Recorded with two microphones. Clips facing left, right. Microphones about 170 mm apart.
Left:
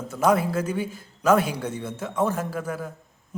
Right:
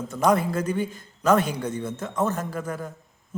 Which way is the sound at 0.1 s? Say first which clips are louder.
Left 1 dB; 5° left (ahead or behind).